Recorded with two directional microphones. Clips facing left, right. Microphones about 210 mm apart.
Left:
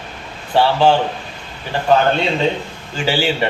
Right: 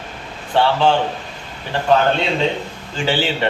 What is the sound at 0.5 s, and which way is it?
Speech, 5° left (ahead or behind).